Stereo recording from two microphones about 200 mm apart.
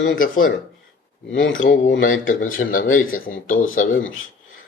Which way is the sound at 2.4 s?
40° left (ahead or behind).